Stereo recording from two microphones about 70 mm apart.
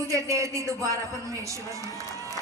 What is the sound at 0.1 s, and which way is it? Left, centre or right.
A man's voice, right.